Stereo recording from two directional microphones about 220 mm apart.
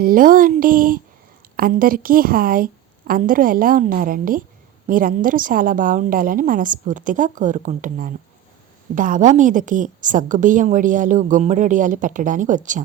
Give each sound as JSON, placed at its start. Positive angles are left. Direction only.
{"t": 0.0, "sound": "a woman's voice", "side_deg": -40}